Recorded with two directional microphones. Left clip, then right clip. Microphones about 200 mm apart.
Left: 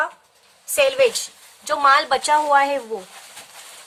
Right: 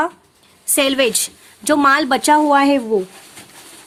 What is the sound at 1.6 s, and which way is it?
Speech, 45° right (ahead or behind).